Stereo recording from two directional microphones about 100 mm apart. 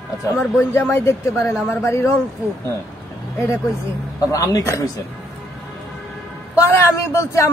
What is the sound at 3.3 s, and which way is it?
Speech, 30° left (ahead or behind).